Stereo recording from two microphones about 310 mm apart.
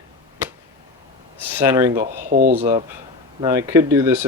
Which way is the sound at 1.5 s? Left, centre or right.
Centre.